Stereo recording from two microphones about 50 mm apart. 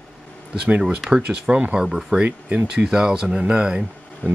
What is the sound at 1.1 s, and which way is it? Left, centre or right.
Speech, right.